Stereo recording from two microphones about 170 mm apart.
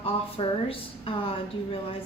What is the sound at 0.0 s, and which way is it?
A woman's voice, 35° left (ahead or behind).